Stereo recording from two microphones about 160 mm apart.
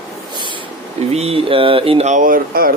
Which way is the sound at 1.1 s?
40° right (ahead or behind).